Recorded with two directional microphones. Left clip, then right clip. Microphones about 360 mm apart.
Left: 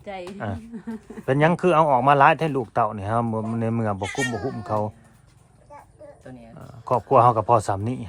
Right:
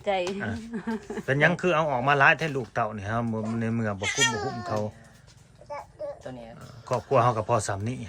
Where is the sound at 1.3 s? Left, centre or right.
Centre.